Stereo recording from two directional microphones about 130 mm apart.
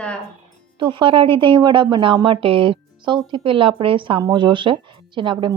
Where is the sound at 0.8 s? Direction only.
40° right (ahead or behind).